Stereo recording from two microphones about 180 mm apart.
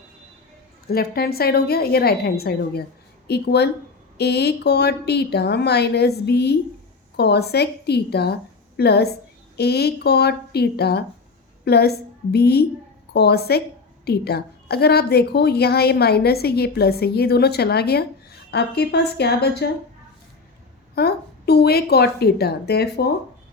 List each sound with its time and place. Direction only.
0.9 s a woman's voice: 60° left (ahead or behind)
20.9 s a woman's voice: 60° left (ahead or behind)